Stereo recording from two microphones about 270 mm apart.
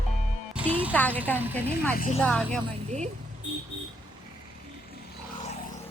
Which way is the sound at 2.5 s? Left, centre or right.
Right.